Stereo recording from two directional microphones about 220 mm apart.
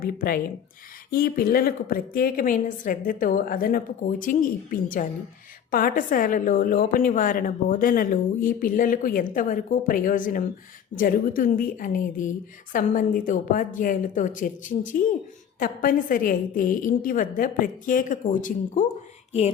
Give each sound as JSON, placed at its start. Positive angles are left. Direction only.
{"t": 0.0, "sound": "a woman's voice", "side_deg": 40}